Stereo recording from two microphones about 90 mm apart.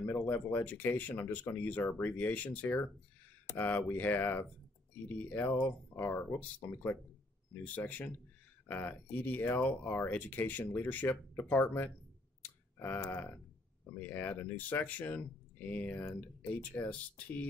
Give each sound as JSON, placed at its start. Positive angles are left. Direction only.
{"t": 0.0, "sound": "speech", "side_deg": 20}
{"t": 12.4, "sound": "clicking", "side_deg": 20}
{"t": 13.9, "sound": "speech", "side_deg": 20}